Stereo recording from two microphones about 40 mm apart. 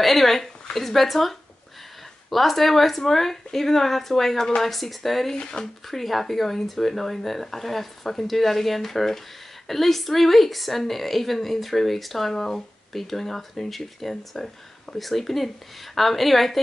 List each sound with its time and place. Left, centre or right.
0.0 s a woman's voice: centre
5.4 s speech: centre
5.9 s a woman's voice: centre